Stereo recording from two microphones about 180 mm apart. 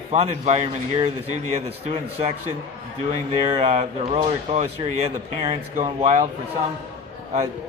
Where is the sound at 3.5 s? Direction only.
35° right (ahead or behind).